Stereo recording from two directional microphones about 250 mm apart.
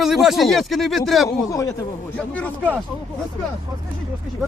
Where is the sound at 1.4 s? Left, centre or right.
Centre.